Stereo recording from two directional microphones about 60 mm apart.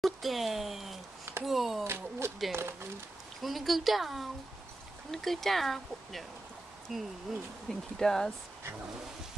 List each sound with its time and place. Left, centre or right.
0.0 s speech: centre
1.9 s a sound: right
3.4 s speech: centre
7.7 s speech: centre